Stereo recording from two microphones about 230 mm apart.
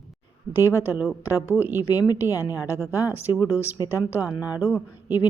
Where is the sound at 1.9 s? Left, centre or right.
Centre.